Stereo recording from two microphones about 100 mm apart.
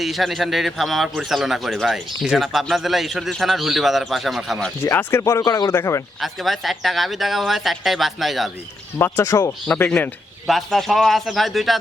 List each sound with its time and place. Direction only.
0.0 s a man's voice: centre (ahead or behind)
4.8 s speech: 25° left (ahead or behind)
5.4 s speech: 40° left (ahead or behind)
5.7 s speech: 30° left (ahead or behind)
6.1 s a man's voice: centre (ahead or behind)
9.0 s speech: 25° left (ahead or behind)
10.4 s a man's voice: centre (ahead or behind)